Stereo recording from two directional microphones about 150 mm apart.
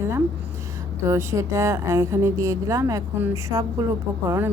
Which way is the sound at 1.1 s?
20° right (ahead or behind).